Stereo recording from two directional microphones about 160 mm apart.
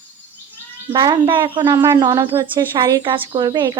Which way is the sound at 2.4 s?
30° right (ahead or behind).